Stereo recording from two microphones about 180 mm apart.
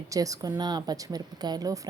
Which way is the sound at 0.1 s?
20° right (ahead or behind).